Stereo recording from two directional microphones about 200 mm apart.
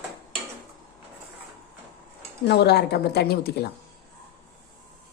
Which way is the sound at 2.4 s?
55° left (ahead or behind).